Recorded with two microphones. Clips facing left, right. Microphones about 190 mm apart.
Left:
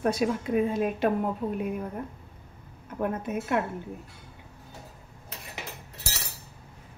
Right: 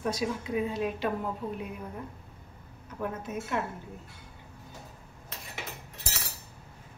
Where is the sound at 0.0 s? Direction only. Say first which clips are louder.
Left 5 dB; 60° left (ahead or behind).